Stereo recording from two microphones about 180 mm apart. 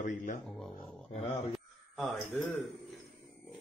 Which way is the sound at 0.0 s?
45° left (ahead or behind).